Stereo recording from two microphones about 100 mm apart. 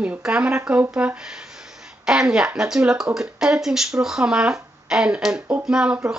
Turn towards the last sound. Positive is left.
turn(degrees=-10)  # may be behind; listen again after turning